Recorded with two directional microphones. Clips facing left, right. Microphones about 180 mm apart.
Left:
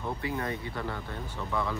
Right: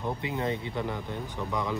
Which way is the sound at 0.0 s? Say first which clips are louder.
Right 2 dB; 20° right (ahead or behind).